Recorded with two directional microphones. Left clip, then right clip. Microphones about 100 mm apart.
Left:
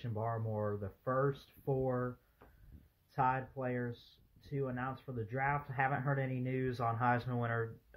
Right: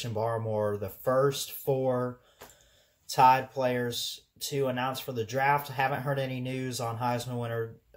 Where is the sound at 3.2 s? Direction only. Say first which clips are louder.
Right 13 dB; 25° right (ahead or behind).